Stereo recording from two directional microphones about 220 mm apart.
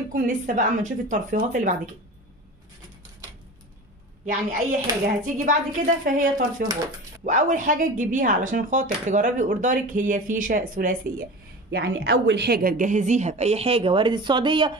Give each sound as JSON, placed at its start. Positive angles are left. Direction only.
{"t": 0.1, "sound": "speech", "side_deg": -35}
{"t": 4.3, "sound": "speech", "side_deg": -35}